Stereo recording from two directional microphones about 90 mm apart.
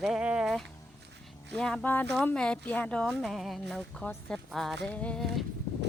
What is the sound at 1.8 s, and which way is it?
Speech, 20° left (ahead or behind).